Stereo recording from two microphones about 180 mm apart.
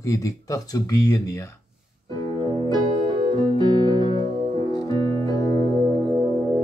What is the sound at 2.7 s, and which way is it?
Music, 25° right (ahead or behind).